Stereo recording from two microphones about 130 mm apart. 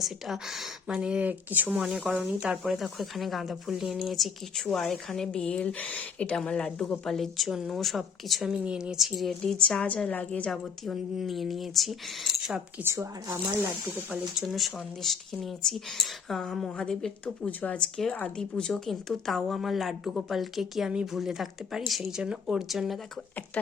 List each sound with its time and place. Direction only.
0.0 s speech: centre (ahead or behind)
12.8 s speech: 20° right (ahead or behind)
14.3 s speech: centre (ahead or behind)